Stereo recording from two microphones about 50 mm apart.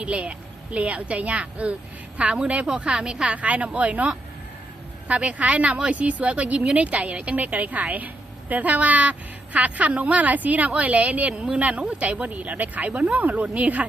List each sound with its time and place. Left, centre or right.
0.0 s a woman's voice: right
3.3 s a woman's voice: right